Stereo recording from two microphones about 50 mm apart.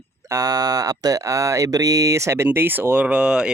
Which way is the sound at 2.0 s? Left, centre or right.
Right.